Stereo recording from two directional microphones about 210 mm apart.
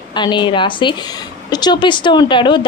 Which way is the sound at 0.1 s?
20° left (ahead or behind).